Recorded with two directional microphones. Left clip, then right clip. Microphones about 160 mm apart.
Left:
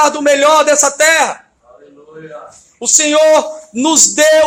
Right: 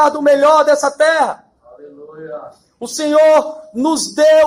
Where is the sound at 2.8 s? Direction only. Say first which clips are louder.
Left 1 dB; 35° left (ahead or behind).